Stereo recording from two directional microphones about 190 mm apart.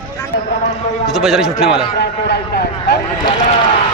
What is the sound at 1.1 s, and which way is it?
Speech, centre (ahead or behind).